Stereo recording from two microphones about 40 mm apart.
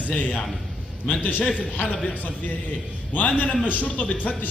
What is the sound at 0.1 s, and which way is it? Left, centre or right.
A man's voice, left.